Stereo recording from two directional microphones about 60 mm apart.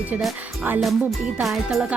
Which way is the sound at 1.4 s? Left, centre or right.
Centre.